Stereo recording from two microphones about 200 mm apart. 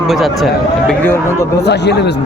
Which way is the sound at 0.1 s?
Centre (ahead or behind).